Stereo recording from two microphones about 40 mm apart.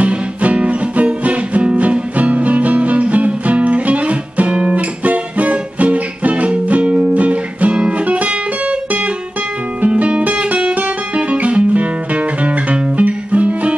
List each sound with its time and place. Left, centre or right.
0.0 s music: right
9.8 s guitar: right